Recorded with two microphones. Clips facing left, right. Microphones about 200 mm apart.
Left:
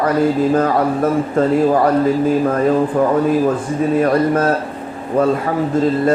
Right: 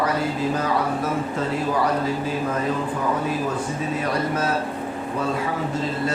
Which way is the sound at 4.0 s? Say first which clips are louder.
Left 9 dB; 55° left (ahead or behind).